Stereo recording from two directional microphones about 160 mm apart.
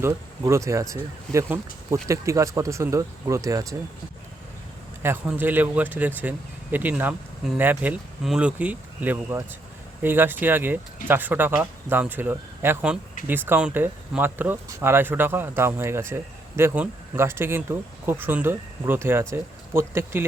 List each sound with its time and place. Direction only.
0.0 s speech: 20° right (ahead or behind)
5.0 s speech: 10° right (ahead or behind)